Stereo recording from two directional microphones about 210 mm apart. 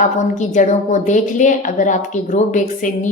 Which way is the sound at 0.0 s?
35° left (ahead or behind).